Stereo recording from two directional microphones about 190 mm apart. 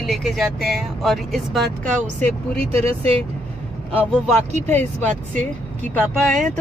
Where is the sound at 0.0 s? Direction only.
Centre (ahead or behind).